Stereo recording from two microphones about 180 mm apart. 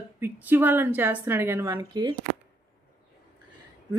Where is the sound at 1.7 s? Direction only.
25° right (ahead or behind).